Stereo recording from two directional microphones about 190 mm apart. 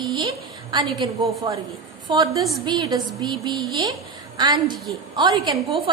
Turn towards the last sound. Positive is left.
turn(degrees=-20)  # may be behind; listen again after turning